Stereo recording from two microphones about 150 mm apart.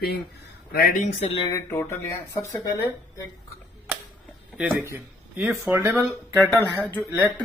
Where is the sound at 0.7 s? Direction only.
80° left.